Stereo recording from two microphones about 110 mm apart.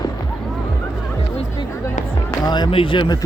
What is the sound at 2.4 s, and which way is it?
Speech, 40° left (ahead or behind).